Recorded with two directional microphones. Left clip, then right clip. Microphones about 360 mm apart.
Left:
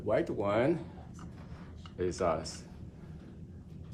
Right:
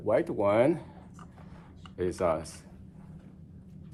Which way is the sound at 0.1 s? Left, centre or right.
Centre.